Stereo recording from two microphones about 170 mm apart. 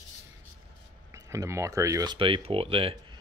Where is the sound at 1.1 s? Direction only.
15° right (ahead or behind).